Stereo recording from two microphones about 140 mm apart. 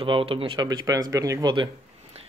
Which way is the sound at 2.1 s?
45° right (ahead or behind).